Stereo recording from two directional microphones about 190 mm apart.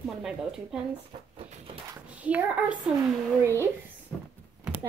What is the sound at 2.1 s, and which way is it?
A child's voice, 5° right (ahead or behind).